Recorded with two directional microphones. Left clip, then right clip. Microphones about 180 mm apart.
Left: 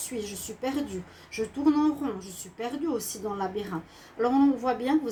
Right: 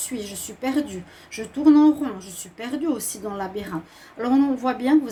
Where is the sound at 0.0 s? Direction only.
50° right (ahead or behind).